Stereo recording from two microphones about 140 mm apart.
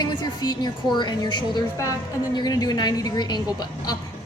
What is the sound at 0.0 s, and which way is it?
A woman's voice, 30° left (ahead or behind).